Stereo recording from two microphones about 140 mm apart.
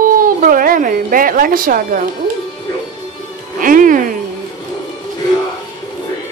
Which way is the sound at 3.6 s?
75° right (ahead or behind).